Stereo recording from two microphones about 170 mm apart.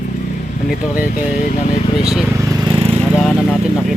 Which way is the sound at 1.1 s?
50° left (ahead or behind).